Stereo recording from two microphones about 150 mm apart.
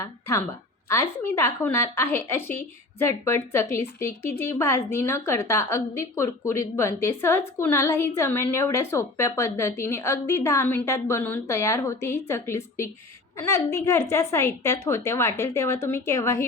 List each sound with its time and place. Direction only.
0.0 s a woman's voice: 20° left (ahead or behind)